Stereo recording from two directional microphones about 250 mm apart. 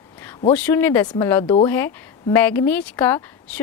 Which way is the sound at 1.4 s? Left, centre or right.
Left.